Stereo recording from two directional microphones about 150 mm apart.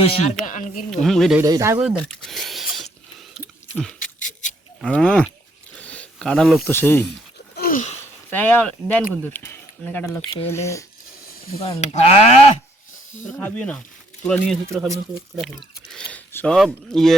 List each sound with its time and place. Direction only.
0.0 s speech: 40° left (ahead or behind)
0.4 s speech: 60° left (ahead or behind)
1.0 s speech: centre (ahead or behind)
1.4 s speech: 20° right (ahead or behind)
2.0 s a sound: 5° left (ahead or behind)
4.8 s speech: 5° left (ahead or behind)
5.7 s a sound: 10° left (ahead or behind)
6.7 s speech: 15° left (ahead or behind)
7.5 s a sound: 85° left
8.3 s speech: 10° left (ahead or behind)
11.6 s speech: 45° left (ahead or behind)
13.3 s speech: 10° left (ahead or behind)
14.7 s speech: 20° right (ahead or behind)
15.4 s speech: 5° left (ahead or behind)